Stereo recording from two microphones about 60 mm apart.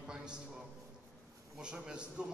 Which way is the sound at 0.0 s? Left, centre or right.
Centre.